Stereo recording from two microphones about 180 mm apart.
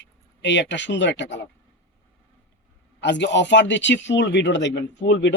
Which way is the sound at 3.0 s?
80° left.